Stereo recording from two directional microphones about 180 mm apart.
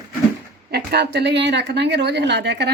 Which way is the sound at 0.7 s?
65° right (ahead or behind).